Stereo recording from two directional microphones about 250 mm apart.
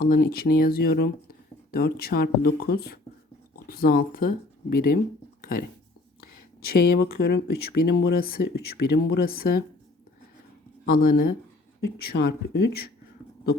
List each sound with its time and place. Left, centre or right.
0.0 s speech: left
5.4 s a sound: left
6.7 s speech: left
10.8 s speech: left